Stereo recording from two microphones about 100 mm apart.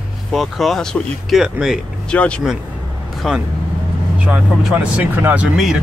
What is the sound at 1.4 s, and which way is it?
Speech, 5° right (ahead or behind).